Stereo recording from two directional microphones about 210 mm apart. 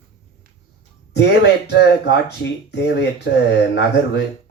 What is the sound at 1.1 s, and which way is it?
Speech, 55° left (ahead or behind).